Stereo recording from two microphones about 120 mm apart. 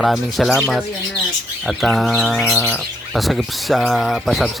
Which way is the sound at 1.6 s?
Centre (ahead or behind).